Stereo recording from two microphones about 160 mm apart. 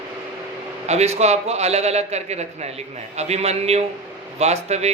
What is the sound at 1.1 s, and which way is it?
A man's voice, 45° right (ahead or behind).